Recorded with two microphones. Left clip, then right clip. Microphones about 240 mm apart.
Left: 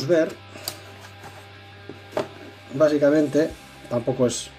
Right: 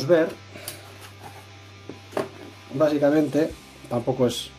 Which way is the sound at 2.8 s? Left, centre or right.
Centre.